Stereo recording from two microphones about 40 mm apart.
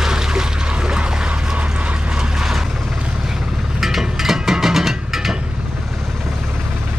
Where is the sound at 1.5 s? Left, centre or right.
Right.